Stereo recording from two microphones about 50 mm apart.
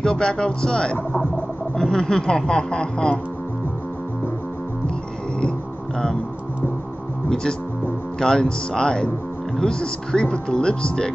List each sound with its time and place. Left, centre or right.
0.0 s speech: centre
8.2 s speech: centre